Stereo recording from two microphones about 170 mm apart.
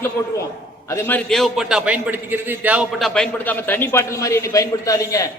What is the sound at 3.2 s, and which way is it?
A man's voice, 10° left (ahead or behind).